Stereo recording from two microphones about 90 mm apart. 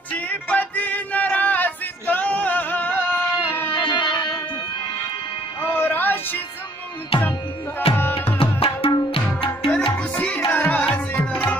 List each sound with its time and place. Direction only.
0.1 s music: 15° left (ahead or behind)
3.8 s music: 60° left (ahead or behind)
5.6 s music: 25° left (ahead or behind)
7.1 s music: 90° left
8.4 s tabla: 90° left
9.9 s music: 15° left (ahead or behind)